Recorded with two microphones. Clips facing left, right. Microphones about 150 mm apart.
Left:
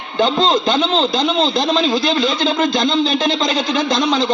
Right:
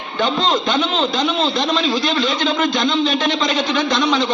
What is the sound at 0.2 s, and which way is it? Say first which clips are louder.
A man's voice: left 3 dB; 35° left (ahead or behind).